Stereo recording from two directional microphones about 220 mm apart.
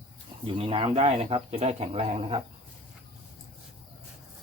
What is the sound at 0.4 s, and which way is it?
Speech, 25° right (ahead or behind).